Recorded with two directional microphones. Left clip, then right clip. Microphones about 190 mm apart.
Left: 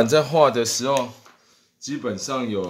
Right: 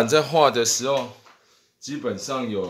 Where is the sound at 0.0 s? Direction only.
15° left (ahead or behind).